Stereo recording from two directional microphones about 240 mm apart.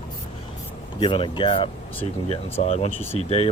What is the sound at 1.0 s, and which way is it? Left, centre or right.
Speech, left.